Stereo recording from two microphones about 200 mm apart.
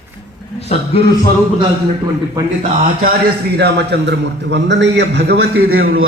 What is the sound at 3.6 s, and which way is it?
A man's voice, 55° right (ahead or behind).